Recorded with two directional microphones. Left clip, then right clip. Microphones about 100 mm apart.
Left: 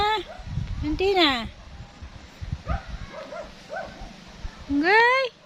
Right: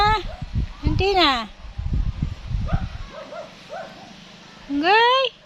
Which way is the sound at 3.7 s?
35° right (ahead or behind).